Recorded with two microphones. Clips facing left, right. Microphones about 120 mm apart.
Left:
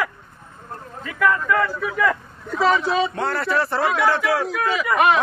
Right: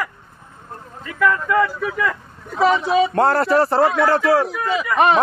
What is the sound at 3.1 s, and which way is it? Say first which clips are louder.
A man's voice: right 7 dB; 40° right (ahead or behind).